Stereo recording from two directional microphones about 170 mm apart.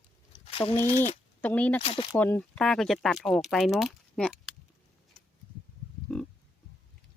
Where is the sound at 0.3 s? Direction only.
30° left (ahead or behind).